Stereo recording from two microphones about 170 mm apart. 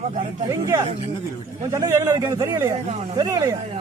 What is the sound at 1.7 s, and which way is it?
A man's voice, 20° right (ahead or behind).